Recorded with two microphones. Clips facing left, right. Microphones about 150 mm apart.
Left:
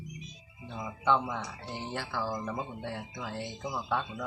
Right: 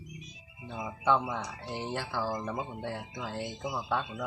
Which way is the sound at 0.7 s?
10° right (ahead or behind).